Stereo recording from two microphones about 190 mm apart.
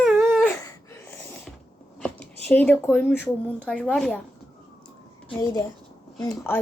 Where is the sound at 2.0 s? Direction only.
5° left (ahead or behind).